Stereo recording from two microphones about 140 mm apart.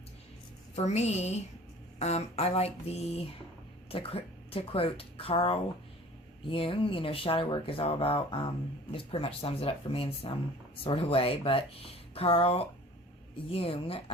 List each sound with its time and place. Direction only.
0.8 s speech: 50° left (ahead or behind)